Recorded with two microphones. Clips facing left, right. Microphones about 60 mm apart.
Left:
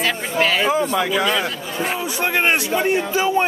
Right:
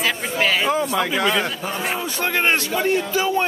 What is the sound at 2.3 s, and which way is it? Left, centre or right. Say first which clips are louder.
Speech: left 1 dB; centre.